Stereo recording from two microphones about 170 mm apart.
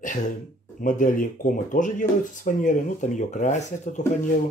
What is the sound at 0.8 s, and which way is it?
Speech, 50° left (ahead or behind).